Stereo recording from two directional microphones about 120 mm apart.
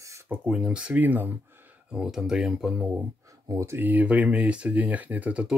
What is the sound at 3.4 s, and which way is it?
Speech, 25° right (ahead or behind).